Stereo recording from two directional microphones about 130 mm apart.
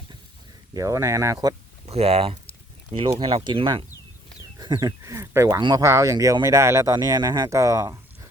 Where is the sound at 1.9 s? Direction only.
50° right (ahead or behind).